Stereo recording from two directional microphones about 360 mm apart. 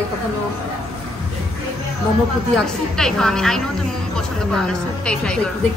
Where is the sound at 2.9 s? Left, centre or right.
Centre.